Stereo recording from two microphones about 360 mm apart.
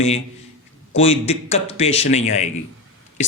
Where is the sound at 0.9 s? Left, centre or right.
Centre.